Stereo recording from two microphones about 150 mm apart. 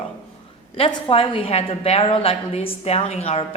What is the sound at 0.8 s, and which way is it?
Speech, 35° left (ahead or behind).